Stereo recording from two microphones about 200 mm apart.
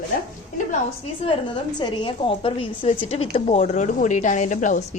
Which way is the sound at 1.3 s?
25° left (ahead or behind).